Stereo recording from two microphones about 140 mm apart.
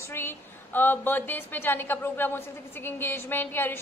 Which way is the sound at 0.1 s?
15° left (ahead or behind).